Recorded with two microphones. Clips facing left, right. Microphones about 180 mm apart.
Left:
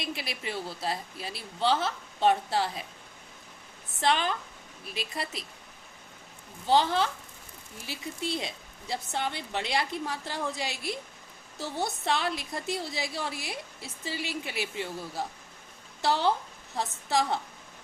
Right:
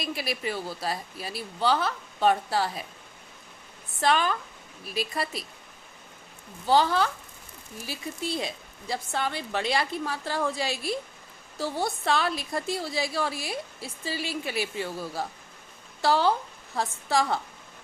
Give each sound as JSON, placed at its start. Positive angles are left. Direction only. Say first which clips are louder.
{"t": 0.0, "sound": "speech", "louder": "right 5 dB", "side_deg": 25}
{"t": 4.0, "sound": "speech", "louder": "right 3 dB", "side_deg": 20}
{"t": 6.7, "sound": "speech", "louder": "right 2 dB", "side_deg": 20}
{"t": 16.0, "sound": "a woman's voice", "louder": "right 3 dB", "side_deg": 20}